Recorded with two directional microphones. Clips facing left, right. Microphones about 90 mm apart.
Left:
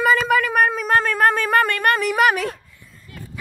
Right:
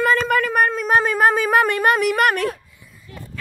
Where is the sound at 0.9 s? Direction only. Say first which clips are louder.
Right 3 dB; 10° right (ahead or behind).